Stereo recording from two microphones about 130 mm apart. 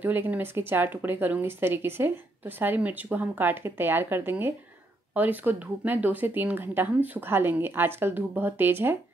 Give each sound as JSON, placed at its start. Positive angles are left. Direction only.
{"t": 0.0, "sound": "speech", "side_deg": -15}